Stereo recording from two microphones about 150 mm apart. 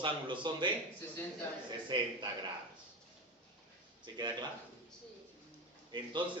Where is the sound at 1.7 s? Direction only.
30° right (ahead or behind).